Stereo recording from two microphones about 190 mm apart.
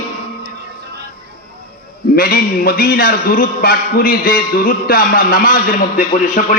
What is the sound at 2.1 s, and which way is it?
A man's voice, 50° left (ahead or behind).